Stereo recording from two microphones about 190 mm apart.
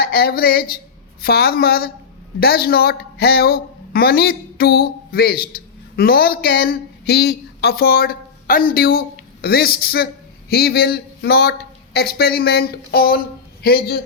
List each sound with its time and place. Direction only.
0.0 s a woman's voice: 55° left (ahead or behind)